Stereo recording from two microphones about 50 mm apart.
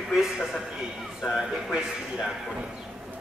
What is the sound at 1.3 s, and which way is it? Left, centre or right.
Speech, centre.